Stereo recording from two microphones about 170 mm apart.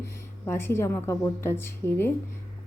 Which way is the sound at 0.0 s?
15° left (ahead or behind).